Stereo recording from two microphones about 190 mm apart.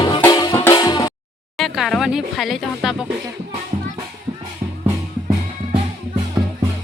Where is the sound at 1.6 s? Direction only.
Centre (ahead or behind).